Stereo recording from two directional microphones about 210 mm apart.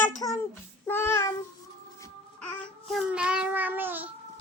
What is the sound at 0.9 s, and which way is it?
Child singing, 10° left (ahead or behind).